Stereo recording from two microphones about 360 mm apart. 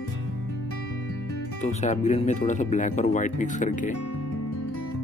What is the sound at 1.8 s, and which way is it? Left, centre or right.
Speech, centre.